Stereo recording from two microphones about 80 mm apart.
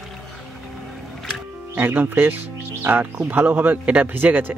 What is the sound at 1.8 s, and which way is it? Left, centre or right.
Speech, right.